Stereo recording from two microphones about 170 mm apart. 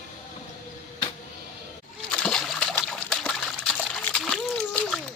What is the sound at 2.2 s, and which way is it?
Trickle, 5° left (ahead or behind).